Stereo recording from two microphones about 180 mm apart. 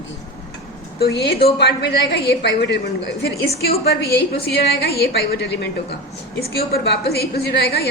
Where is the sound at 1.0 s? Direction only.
65° left (ahead or behind).